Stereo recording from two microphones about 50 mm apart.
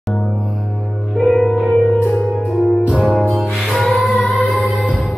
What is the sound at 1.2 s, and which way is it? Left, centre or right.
Music, centre.